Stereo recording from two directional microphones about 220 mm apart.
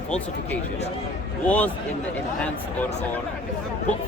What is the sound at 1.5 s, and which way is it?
Speech, 5° left (ahead or behind).